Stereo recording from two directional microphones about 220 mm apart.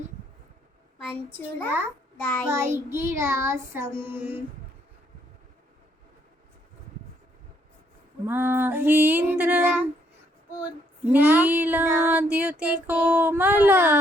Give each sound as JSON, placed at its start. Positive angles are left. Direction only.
{"t": 2.2, "sound": "a child's voice", "side_deg": 10}
{"t": 2.5, "sound": "female singing", "side_deg": -10}
{"t": 8.3, "sound": "female singing", "side_deg": -10}